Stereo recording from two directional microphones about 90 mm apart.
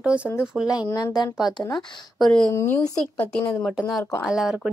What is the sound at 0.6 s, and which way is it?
Speech, 45° left (ahead or behind).